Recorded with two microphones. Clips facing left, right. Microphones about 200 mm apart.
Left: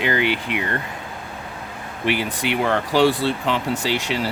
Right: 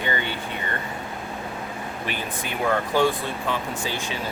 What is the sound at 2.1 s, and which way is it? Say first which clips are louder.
Speech: left 11 dB; 80° left.